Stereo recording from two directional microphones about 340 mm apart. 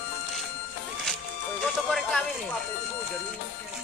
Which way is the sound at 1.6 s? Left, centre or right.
Centre.